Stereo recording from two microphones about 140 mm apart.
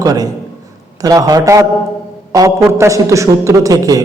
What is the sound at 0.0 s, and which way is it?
A man's voice, 25° right (ahead or behind).